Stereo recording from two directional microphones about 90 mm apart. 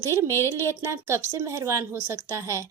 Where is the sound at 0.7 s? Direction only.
30° right (ahead or behind).